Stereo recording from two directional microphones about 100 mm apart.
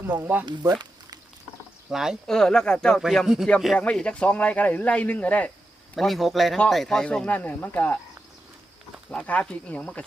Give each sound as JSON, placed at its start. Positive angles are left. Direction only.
{"t": 0.0, "sound": "speech", "side_deg": -20}
{"t": 0.6, "sound": "a sound", "side_deg": -40}
{"t": 1.9, "sound": "speech", "side_deg": -5}
{"t": 3.0, "sound": "speech", "side_deg": 0}
{"t": 3.8, "sound": "speech", "side_deg": 10}
{"t": 5.9, "sound": "speech", "side_deg": 0}
{"t": 9.0, "sound": "speech", "side_deg": 10}